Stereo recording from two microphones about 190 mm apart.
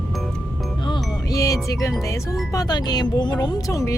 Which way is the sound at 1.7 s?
15° left (ahead or behind).